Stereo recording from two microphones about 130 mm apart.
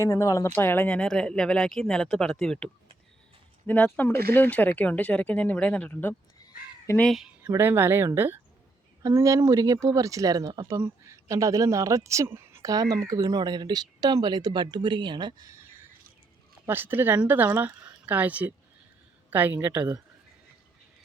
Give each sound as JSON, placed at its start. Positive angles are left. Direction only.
{"t": 0.0, "sound": "speech", "side_deg": 25}
{"t": 3.7, "sound": "speech", "side_deg": 15}
{"t": 7.4, "sound": "speech", "side_deg": -15}
{"t": 15.5, "sound": "a sound", "side_deg": -20}
{"t": 16.6, "sound": "speech", "side_deg": -15}